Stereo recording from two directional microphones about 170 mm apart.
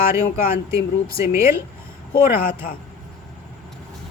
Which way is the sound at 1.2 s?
15° right (ahead or behind).